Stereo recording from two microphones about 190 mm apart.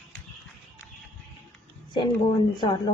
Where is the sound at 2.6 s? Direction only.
25° left (ahead or behind).